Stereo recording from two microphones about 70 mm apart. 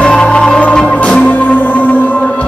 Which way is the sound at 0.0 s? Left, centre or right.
Centre.